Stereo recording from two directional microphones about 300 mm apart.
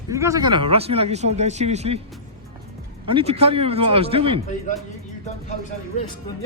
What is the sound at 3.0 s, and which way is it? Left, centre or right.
A man's voice, centre.